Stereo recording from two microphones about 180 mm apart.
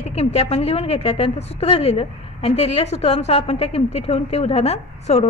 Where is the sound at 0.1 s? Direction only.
35° left (ahead or behind).